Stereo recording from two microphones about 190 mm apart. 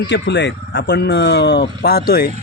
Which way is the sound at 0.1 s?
70° left (ahead or behind).